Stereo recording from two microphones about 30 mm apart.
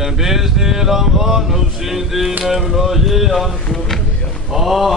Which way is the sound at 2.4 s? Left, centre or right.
Centre.